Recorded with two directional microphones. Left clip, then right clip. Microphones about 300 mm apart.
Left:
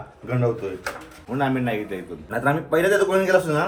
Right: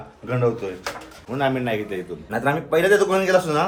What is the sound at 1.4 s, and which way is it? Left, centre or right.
Speech, centre.